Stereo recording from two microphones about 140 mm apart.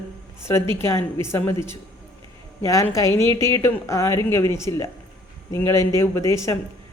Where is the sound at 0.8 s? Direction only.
20° left (ahead or behind).